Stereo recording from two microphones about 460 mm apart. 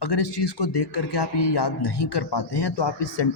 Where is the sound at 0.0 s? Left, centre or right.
Left.